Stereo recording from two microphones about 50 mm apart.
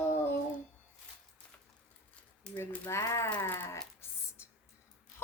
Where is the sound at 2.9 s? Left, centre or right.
Left.